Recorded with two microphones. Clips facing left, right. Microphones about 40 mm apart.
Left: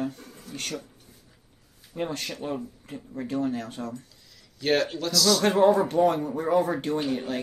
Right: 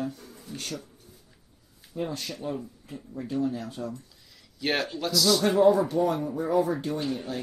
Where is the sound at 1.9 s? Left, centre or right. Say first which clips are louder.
Left 2 dB; left.